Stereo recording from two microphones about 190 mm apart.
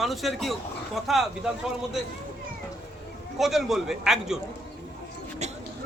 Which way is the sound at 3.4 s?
Centre (ahead or behind).